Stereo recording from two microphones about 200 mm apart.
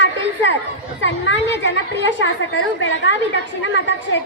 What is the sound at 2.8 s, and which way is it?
Speech, 65° left (ahead or behind).